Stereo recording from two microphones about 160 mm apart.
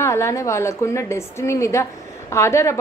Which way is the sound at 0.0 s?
15° left (ahead or behind).